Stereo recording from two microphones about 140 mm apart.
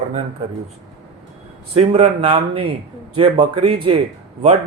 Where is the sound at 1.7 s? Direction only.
45° right (ahead or behind).